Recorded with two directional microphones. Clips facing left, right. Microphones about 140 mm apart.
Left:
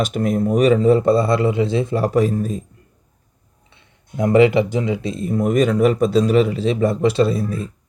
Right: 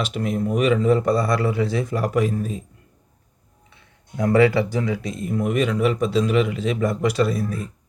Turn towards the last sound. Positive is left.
turn(degrees=25)  # may be behind; listen again after turning